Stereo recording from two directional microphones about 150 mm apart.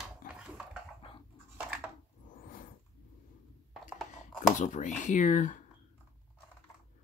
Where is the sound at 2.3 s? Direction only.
65° left (ahead or behind).